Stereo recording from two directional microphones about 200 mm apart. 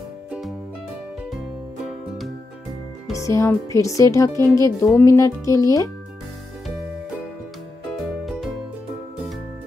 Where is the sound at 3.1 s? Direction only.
15° left (ahead or behind).